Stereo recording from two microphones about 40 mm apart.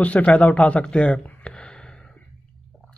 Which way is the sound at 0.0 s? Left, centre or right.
Left.